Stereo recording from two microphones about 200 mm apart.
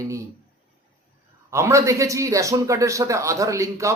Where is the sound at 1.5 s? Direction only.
15° right (ahead or behind).